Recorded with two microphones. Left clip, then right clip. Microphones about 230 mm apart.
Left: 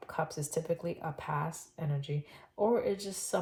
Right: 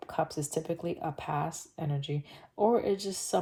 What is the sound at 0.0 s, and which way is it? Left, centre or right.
Speech, right.